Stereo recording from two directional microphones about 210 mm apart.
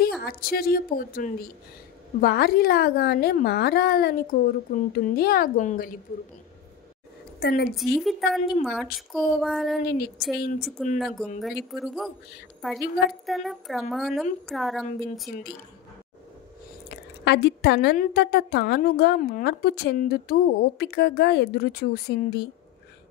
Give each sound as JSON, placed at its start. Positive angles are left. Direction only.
{"t": 0.2, "sound": "a woman's voice", "side_deg": 45}
{"t": 7.3, "sound": "a woman's voice", "side_deg": 50}
{"t": 7.7, "sound": "a woman's voice", "side_deg": 0}
{"t": 9.8, "sound": "a woman's voice", "side_deg": 45}
{"t": 11.0, "sound": "a woman's voice", "side_deg": 0}
{"t": 16.9, "sound": "a woman's voice", "side_deg": 50}